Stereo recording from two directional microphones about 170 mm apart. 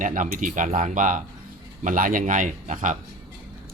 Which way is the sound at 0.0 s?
50° right (ahead or behind).